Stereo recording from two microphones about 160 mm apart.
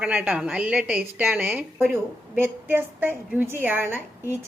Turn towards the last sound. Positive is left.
turn(degrees=-15)  # may be behind; listen again after turning